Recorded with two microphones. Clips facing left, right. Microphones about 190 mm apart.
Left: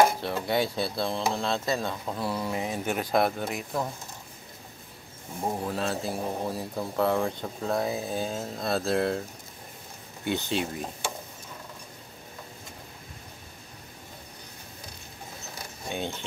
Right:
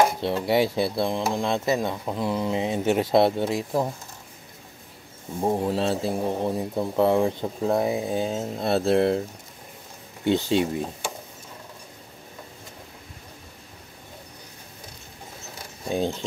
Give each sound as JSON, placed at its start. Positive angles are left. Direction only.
{"t": 0.2, "sound": "speech", "side_deg": -25}
{"t": 5.4, "sound": "speech", "side_deg": -30}
{"t": 10.2, "sound": "speech", "side_deg": -25}
{"t": 15.9, "sound": "speech", "side_deg": -35}